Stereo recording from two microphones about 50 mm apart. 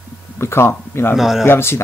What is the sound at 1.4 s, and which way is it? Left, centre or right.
Speech, left.